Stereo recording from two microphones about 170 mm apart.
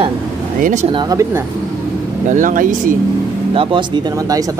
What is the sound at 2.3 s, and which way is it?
Speech, 50° right (ahead or behind).